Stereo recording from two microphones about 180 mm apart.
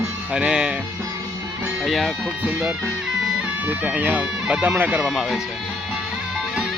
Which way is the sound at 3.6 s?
10° right (ahead or behind).